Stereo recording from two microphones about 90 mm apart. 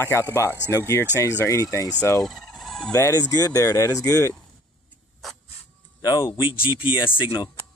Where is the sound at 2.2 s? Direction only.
Centre (ahead or behind).